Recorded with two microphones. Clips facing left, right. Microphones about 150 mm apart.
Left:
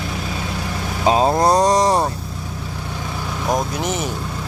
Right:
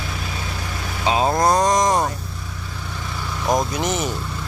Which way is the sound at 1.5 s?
35° left (ahead or behind).